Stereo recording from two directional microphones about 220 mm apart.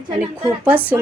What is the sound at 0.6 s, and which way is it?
Speech, 10° right (ahead or behind).